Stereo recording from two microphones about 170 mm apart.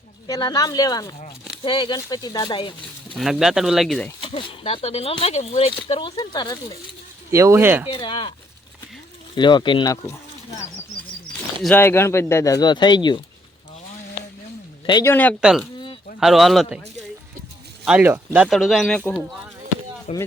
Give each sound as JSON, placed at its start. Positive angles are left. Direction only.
{"t": 0.3, "sound": "speech", "side_deg": 20}
{"t": 3.2, "sound": "speech", "side_deg": 0}
{"t": 4.2, "sound": "speech", "side_deg": 30}
{"t": 7.3, "sound": "speech", "side_deg": -15}
{"t": 7.9, "sound": "speech", "side_deg": 30}
{"t": 9.3, "sound": "speech", "side_deg": 25}
{"t": 14.8, "sound": "speech", "side_deg": 25}
{"t": 15.1, "sound": "speech", "side_deg": 10}
{"t": 15.4, "sound": "speech", "side_deg": -5}
{"t": 17.8, "sound": "speech", "side_deg": -10}
{"t": 20.1, "sound": "speech", "side_deg": 40}